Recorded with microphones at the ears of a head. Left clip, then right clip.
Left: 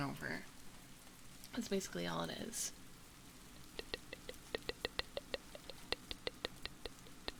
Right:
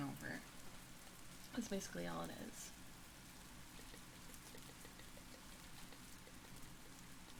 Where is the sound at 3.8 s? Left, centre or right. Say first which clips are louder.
Left 11 dB; left.